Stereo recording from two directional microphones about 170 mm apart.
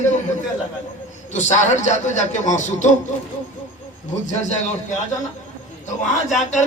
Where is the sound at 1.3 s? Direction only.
45° left (ahead or behind).